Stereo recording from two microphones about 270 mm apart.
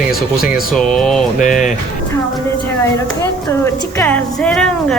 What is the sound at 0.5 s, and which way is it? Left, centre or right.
Speech, centre.